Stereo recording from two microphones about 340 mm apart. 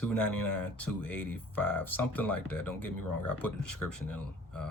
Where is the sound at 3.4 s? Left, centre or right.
Left.